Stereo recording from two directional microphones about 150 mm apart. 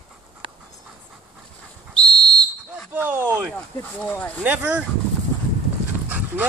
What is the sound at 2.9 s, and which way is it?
Speech, 15° right (ahead or behind).